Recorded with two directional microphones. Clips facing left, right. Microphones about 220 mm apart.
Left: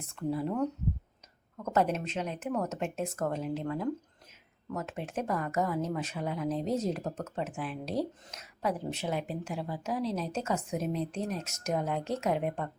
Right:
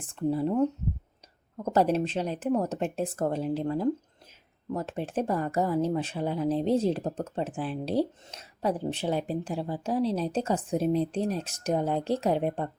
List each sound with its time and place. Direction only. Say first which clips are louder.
0.0 s speech: right 5 dB; 30° right (ahead or behind)